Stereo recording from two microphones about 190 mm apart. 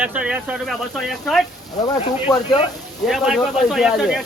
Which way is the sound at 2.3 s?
20° left (ahead or behind).